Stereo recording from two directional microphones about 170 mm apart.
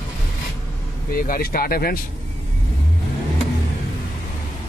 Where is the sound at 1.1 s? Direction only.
60° left (ahead or behind).